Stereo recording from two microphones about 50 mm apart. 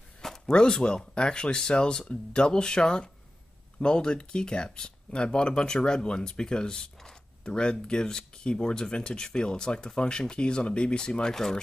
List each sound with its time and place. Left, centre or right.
0.5 s speech: centre